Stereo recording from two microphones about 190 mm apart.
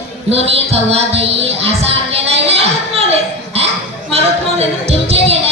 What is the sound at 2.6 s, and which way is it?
Laughter, 30° right (ahead or behind).